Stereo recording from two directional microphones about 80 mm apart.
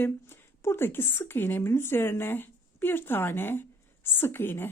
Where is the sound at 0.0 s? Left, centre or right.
Left.